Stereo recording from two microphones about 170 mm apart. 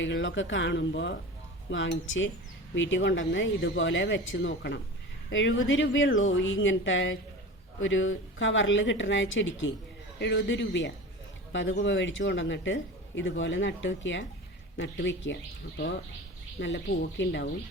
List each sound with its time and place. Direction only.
0.0 s speech: 90° left
16.6 s speech: 85° left